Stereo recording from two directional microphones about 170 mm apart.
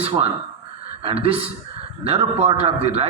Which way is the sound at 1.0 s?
35° right (ahead or behind).